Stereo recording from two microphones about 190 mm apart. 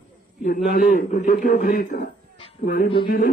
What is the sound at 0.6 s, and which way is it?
Speech, 45° left (ahead or behind).